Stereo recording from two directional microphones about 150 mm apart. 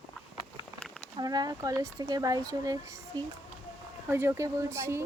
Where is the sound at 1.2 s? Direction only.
25° right (ahead or behind).